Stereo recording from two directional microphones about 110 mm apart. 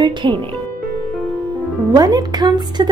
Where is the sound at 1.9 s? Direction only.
35° right (ahead or behind).